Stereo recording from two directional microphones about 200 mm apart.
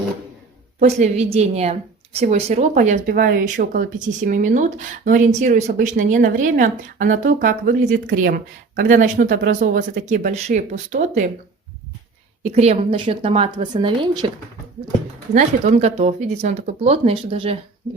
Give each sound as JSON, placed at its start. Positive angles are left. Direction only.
{"t": 0.8, "sound": "speech", "side_deg": -35}
{"t": 12.4, "sound": "a woman's voice", "side_deg": -35}
{"t": 15.3, "sound": "speech", "side_deg": -35}